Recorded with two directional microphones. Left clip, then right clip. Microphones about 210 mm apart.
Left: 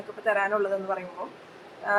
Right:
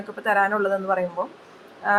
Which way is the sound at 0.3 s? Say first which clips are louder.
Right 4 dB; 35° right (ahead or behind).